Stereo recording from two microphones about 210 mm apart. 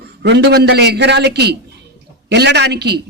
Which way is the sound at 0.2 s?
55° right (ahead or behind).